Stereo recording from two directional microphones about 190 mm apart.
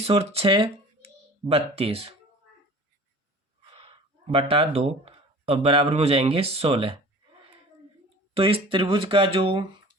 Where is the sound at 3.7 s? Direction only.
30° right (ahead or behind).